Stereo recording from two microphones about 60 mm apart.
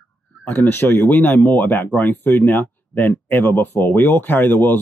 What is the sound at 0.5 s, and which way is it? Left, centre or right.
Speech, left.